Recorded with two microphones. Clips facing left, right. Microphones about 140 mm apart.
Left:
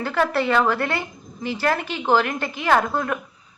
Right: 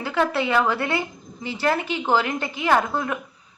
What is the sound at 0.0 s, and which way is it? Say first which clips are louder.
A woman's voice: left 1 dB; 15° right (ahead or behind).